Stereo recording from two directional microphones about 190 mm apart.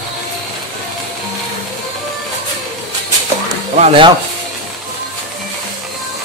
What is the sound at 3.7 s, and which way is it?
Speech, 30° right (ahead or behind).